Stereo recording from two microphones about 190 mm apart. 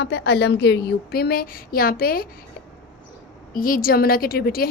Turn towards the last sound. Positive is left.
turn(degrees=55)  # may be behind; listen again after turning